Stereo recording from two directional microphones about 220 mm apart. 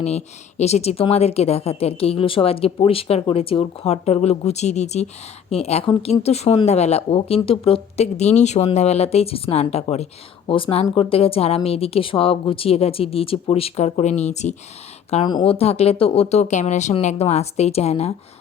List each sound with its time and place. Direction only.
0.0 s a woman's voice: 30° left (ahead or behind)
15.1 s a woman's voice: 20° left (ahead or behind)